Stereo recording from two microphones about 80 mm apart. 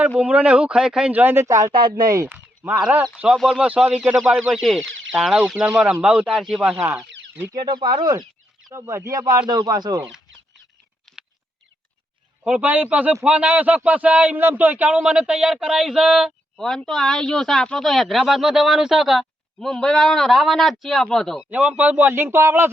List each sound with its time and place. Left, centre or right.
0.2 s speech: centre
1.5 s speech: right
1.7 s speech: right
2.3 s a sound: right
3.3 s speech: centre
7.5 s speech: right
8.7 s speech: right
9.5 s speech: right
12.5 s speech: centre
16.6 s speech: centre
21.5 s speech: centre